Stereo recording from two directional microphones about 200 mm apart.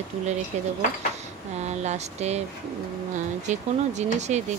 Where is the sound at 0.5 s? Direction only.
35° right (ahead or behind).